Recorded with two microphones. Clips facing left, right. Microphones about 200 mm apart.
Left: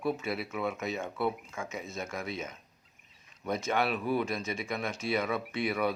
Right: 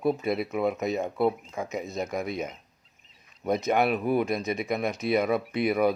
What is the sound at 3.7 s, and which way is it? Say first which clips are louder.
Speech: right 5 dB; 45° right (ahead or behind).